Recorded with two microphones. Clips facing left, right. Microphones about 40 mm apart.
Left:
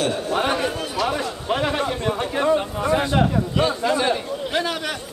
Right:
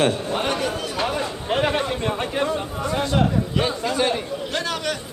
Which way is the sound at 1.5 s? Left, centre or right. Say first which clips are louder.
Right 1 dB; centre.